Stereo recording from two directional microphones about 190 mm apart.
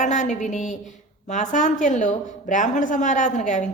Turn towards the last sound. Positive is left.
turn(degrees=40)  # may be behind; listen again after turning